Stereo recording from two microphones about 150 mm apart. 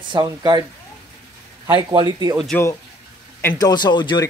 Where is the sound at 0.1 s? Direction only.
30° right (ahead or behind).